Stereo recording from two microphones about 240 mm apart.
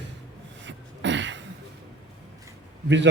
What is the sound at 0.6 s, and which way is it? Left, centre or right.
Throat clearing, right.